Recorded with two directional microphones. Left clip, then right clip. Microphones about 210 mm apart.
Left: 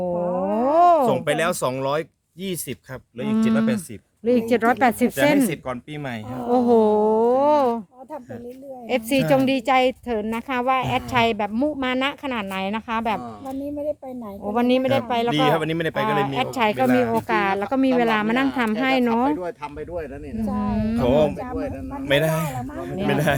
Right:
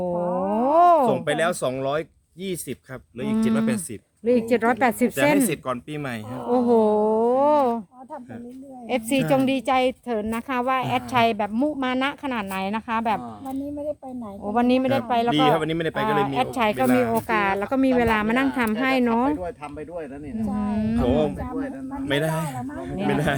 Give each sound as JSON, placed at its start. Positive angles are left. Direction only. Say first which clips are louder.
{"t": 0.2, "sound": "a sound", "louder": "even", "side_deg": 30}
{"t": 0.6, "sound": "a sound", "louder": "even", "side_deg": 5}
{"t": 1.0, "sound": "speech", "louder": "left 1 dB", "side_deg": 40}
{"t": 3.2, "sound": "a woman's voice", "louder": "left 2 dB", "side_deg": 15}
{"t": 6.5, "sound": "a sound", "louder": "left 2 dB", "side_deg": 10}
{"t": 8.9, "sound": "a woman's voice", "louder": "left 2 dB", "side_deg": 15}
{"t": 14.4, "sound": "speech", "louder": "left 1 dB", "side_deg": 5}
{"t": 15.4, "sound": "speech", "louder": "even", "side_deg": 35}
{"t": 16.0, "sound": "a woman's voice", "louder": "right 2 dB", "side_deg": 0}
{"t": 19.4, "sound": "a man's voice", "louder": "left 2 dB", "side_deg": 50}
{"t": 20.6, "sound": "speech", "louder": "left 2 dB", "side_deg": 5}
{"t": 20.9, "sound": "speech", "louder": "left 4 dB", "side_deg": 40}
{"t": 21.5, "sound": "a man's voice", "louder": "left 2 dB", "side_deg": 30}
{"t": 22.0, "sound": "a man's voice", "louder": "left 4 dB", "side_deg": 45}